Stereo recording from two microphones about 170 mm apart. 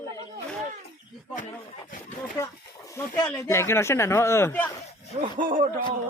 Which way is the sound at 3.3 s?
20° left (ahead or behind).